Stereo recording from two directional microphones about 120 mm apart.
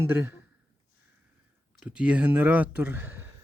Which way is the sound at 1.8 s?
10° right (ahead or behind).